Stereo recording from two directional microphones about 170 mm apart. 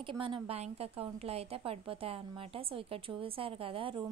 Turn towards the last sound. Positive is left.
turn(degrees=-30)  # may be behind; listen again after turning